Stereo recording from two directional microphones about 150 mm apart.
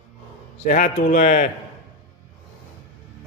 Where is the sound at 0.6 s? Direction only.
60° left (ahead or behind).